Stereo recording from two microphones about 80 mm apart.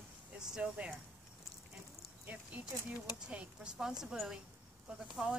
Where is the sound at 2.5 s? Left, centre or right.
Centre.